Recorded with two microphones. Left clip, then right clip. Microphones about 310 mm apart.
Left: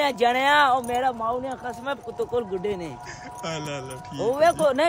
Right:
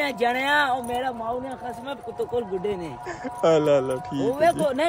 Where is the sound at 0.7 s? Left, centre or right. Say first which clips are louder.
Left 3 dB; centre.